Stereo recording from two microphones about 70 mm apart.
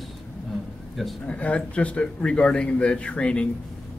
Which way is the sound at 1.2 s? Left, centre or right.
Centre.